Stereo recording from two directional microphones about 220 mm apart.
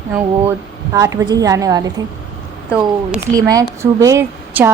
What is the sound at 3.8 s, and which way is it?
Speech, 15° right (ahead or behind).